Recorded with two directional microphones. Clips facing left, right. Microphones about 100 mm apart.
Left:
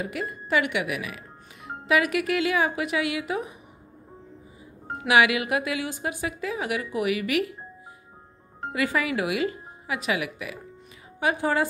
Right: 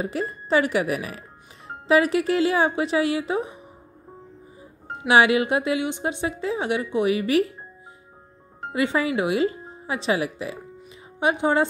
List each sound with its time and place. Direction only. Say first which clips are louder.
0.0 s speech: right 4 dB; 30° right (ahead or behind)
4.9 s speech: right 3 dB; 30° right (ahead or behind)
8.7 s speech: right 3 dB; 25° right (ahead or behind)